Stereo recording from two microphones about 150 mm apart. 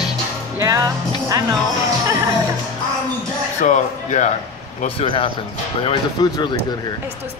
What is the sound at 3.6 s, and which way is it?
Speech, 55° left (ahead or behind).